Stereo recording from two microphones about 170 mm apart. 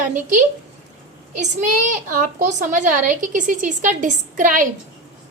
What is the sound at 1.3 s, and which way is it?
A woman's voice, 45° right (ahead or behind).